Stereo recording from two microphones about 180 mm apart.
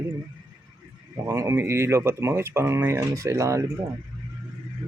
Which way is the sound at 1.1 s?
15° right (ahead or behind).